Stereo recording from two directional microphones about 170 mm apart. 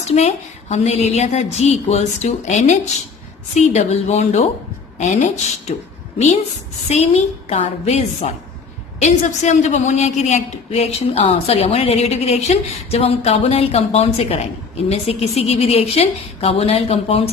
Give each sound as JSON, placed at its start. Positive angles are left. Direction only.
{"t": 0.0, "sound": "a woman's voice", "side_deg": 40}